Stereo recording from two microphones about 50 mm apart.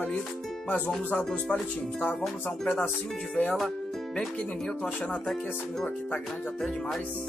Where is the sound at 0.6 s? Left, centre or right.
Left.